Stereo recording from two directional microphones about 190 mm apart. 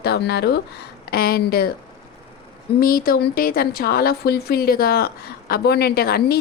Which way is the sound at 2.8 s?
50° left (ahead or behind).